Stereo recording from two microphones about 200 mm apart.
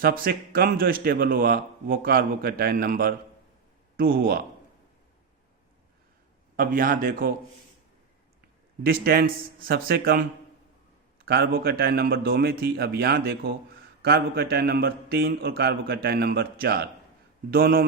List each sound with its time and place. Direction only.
0.0 s a man's voice: 50° right (ahead or behind)
6.6 s a man's voice: 45° right (ahead or behind)
8.8 s a man's voice: 50° right (ahead or behind)
11.3 s a man's voice: 50° right (ahead or behind)